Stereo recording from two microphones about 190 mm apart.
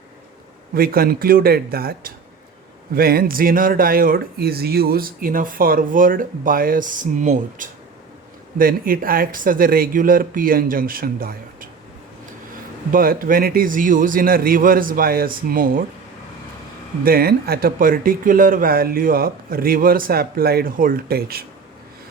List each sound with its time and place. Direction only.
0.7 s speech: 50° right (ahead or behind)
12.9 s speech: 50° right (ahead or behind)
17.0 s speech: 50° right (ahead or behind)